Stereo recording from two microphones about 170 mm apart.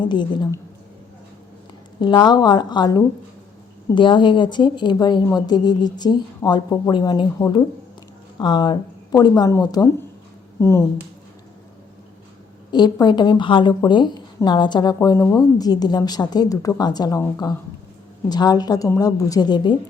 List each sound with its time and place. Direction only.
0.0 s a woman's voice: 25° left (ahead or behind)
2.0 s a woman's voice: 25° left (ahead or behind)
12.7 s a woman's voice: 25° left (ahead or behind)